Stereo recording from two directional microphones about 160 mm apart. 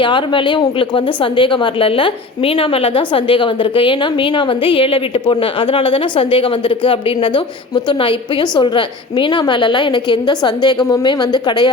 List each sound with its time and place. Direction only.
0.0 s a woman's voice: 30° left (ahead or behind)